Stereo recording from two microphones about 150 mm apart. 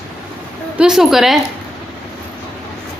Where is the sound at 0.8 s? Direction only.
5° right (ahead or behind).